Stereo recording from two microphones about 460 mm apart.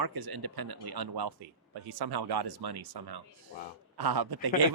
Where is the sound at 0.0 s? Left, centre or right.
Right.